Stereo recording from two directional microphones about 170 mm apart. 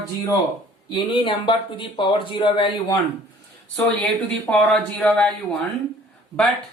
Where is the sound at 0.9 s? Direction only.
30° left (ahead or behind).